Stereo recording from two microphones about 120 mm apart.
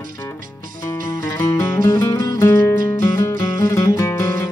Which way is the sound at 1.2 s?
20° left (ahead or behind).